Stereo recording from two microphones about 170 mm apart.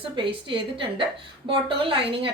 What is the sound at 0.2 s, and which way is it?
A woman's voice, 30° right (ahead or behind).